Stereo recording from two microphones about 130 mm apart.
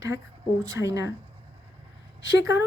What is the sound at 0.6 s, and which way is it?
Speech, 25° right (ahead or behind).